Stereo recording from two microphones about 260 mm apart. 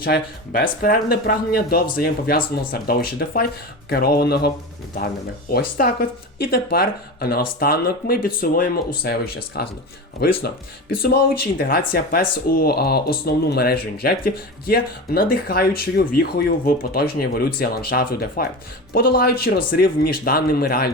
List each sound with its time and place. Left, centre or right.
0.0 s speech: left